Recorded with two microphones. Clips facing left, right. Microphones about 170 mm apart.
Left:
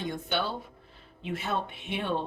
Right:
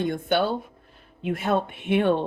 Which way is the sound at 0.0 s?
55° right (ahead or behind).